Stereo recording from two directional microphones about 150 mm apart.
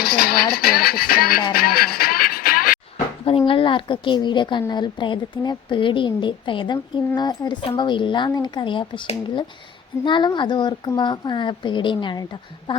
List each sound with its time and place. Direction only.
0.0 s a sound: 90° left
0.5 s music: 90° left; by 2.7 s 75° left (ahead or behind)
3.2 s a woman's voice: 40° left (ahead or behind)